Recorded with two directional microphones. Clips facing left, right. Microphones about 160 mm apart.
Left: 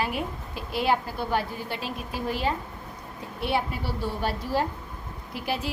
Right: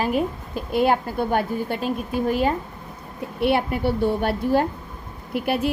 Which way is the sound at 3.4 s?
60° right (ahead or behind).